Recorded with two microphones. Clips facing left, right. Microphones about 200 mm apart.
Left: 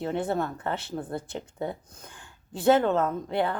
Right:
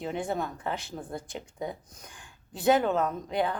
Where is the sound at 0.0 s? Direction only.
15° right (ahead or behind).